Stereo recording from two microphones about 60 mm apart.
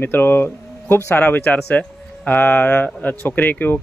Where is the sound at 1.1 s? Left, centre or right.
Left.